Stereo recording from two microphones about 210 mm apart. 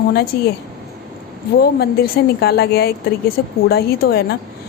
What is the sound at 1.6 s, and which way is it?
Speech, 45° left (ahead or behind).